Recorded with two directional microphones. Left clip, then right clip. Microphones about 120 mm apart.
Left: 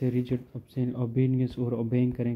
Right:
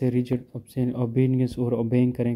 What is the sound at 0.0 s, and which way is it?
Speech, 35° right (ahead or behind).